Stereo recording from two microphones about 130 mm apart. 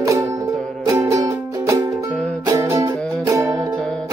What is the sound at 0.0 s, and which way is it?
Music, 25° right (ahead or behind).